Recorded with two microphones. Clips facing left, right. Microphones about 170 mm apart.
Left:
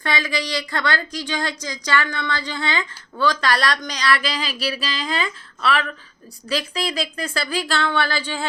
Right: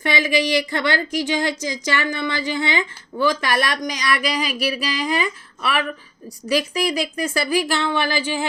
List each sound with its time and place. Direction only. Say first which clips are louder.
0.0 s a woman's voice: right 5 dB; 20° right (ahead or behind)